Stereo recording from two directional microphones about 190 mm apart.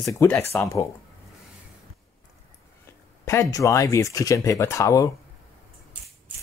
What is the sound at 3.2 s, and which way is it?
Speech, 15° left (ahead or behind).